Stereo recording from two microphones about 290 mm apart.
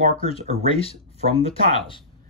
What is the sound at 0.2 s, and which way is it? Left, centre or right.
Speech, centre.